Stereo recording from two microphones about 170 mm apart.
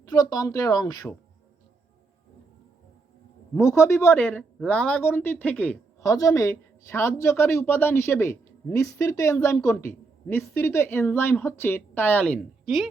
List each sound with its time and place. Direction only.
0.0 s speech: 20° left (ahead or behind)
3.5 s a woman's voice: 15° left (ahead or behind); by 12.9 s centre (ahead or behind)